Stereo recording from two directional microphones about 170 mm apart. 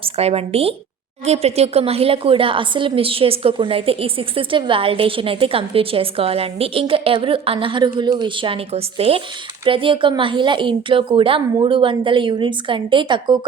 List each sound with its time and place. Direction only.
0.0 s a woman's voice: 35° right (ahead or behind)